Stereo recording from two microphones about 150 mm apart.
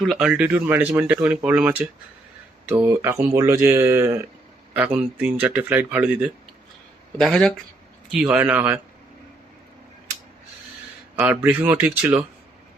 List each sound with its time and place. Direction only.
0.0 s speech: centre (ahead or behind)
7.2 s speech: centre (ahead or behind)
11.2 s speech: 15° right (ahead or behind)